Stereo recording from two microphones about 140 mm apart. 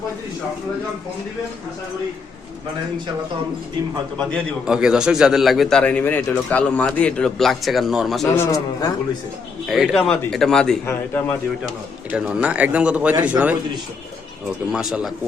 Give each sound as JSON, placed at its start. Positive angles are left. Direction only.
{"t": 4.6, "sound": "speech", "side_deg": -5}
{"t": 8.4, "sound": "a man's voice", "side_deg": 25}
{"t": 9.6, "sound": "speech", "side_deg": 0}
{"t": 10.8, "sound": "a man's voice", "side_deg": 15}
{"t": 12.1, "sound": "a man's voice", "side_deg": -5}
{"t": 14.7, "sound": "speech", "side_deg": -5}